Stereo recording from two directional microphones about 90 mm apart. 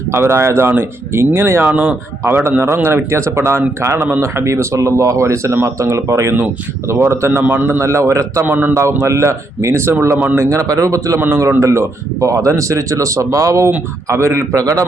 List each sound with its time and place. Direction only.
0.1 s a man's voice: 30° right (ahead or behind)